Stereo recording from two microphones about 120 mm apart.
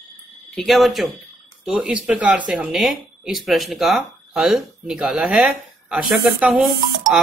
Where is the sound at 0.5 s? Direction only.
Centre (ahead or behind).